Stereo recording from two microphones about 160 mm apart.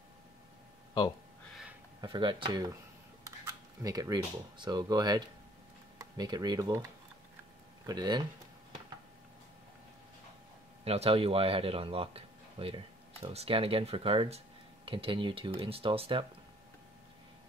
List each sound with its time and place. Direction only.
2.0 s speech: 30° right (ahead or behind)
10.8 s speech: 40° right (ahead or behind)